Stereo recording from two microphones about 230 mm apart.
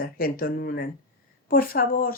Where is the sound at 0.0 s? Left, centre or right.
Left.